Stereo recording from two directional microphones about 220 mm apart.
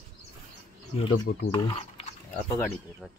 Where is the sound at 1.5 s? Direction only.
20° left (ahead or behind).